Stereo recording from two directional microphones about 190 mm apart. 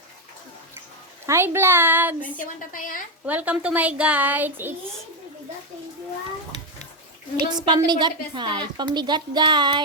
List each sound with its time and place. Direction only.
1.3 s a woman's voice: 15° right (ahead or behind)
2.4 s a woman's voice: 45° left (ahead or behind)
3.2 s a woman's voice: 10° right (ahead or behind)
7.3 s a woman's voice: 25° right (ahead or behind)